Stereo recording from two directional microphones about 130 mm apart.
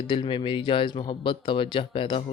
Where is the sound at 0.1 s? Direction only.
40° left (ahead or behind).